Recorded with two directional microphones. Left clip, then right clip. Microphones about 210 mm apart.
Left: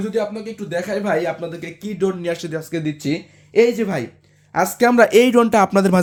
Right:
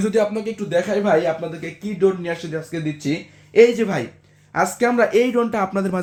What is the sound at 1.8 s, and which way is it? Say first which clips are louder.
Speech: right 3 dB; 50° left (ahead or behind).